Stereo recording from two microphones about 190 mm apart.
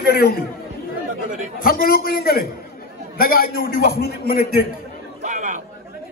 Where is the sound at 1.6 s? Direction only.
50° left (ahead or behind).